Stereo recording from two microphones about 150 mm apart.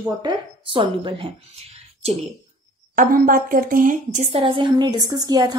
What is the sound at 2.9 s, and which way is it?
A woman's voice, 70° right (ahead or behind).